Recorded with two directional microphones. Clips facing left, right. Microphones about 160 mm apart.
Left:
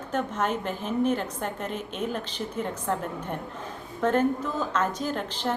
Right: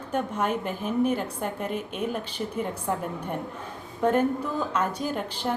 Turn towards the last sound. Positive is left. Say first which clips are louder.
# even
turn(degrees=-10)  # may be behind; listen again after turning